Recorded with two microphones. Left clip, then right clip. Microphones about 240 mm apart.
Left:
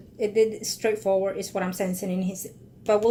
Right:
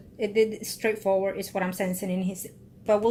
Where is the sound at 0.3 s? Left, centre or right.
Centre.